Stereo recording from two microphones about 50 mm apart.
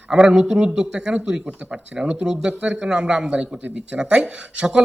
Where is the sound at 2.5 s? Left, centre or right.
Right.